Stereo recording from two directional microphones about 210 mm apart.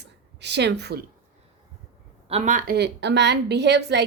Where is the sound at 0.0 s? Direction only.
55° right (ahead or behind).